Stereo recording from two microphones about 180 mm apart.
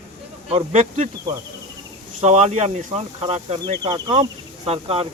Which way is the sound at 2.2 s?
40° right (ahead or behind).